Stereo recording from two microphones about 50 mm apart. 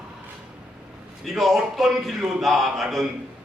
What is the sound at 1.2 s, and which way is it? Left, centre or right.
Speech, centre.